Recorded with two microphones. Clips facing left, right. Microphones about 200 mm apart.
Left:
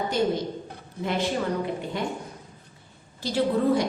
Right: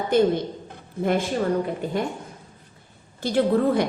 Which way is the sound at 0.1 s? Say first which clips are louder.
Right 7 dB; 55° right (ahead or behind).